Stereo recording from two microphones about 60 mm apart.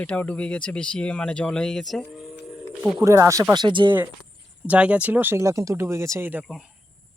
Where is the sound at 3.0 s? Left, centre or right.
Right.